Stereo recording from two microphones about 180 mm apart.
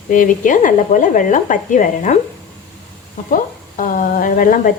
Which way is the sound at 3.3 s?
45° left (ahead or behind).